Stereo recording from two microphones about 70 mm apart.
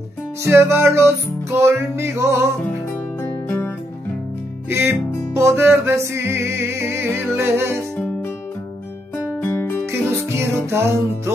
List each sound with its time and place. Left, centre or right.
0.5 s music: right
3.2 s music: left
4.6 s music: right
9.1 s music: left
9.8 s music: right